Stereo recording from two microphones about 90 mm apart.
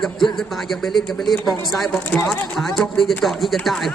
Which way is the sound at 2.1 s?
25° left (ahead or behind).